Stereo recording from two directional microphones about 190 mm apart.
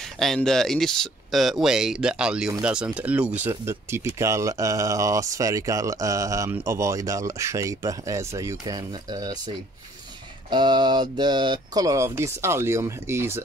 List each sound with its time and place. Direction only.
0.2 s speech: centre (ahead or behind); by 9.4 s 20° right (ahead or behind)
10.5 s speech: 25° right (ahead or behind)